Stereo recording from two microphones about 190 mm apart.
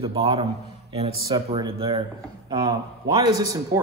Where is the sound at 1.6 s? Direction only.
25° right (ahead or behind).